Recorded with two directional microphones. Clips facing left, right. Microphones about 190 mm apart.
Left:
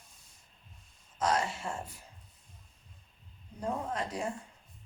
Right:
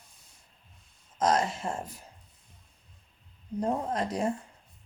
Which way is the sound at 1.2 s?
40° right (ahead or behind).